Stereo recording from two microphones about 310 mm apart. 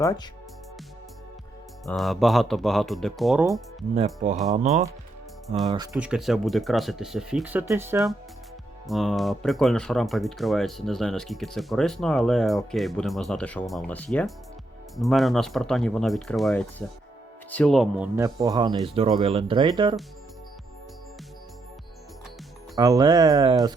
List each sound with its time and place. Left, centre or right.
0.0 s speech: centre
1.9 s speech: centre
3.9 s speech: right
5.9 s speech: centre
18.2 s speech: centre
22.7 s speech: centre